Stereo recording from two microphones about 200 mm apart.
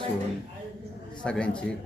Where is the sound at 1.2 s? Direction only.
5° left (ahead or behind).